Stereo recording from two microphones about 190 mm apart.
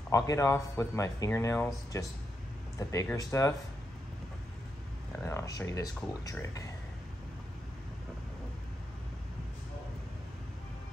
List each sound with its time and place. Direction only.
0.1 s speech: 20° left (ahead or behind)
2.9 s speech: 20° left (ahead or behind)
5.2 s speech: 15° left (ahead or behind)